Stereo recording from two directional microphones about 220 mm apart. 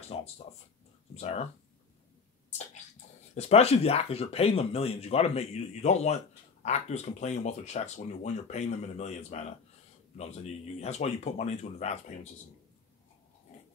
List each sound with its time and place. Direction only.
0.1 s speech: 25° left (ahead or behind)
2.5 s bathtub: 30° left (ahead or behind)
3.3 s speech: 30° left (ahead or behind)